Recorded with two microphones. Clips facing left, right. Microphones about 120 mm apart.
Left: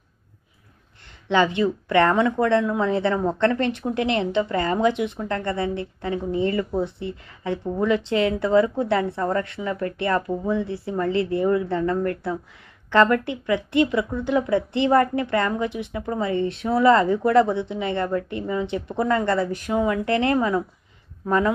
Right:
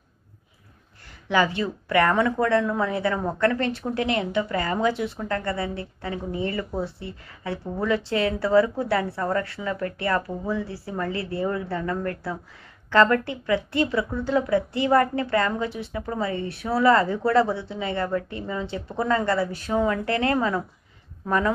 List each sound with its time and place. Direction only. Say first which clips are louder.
1.3 s speech: left 3 dB; 20° left (ahead or behind)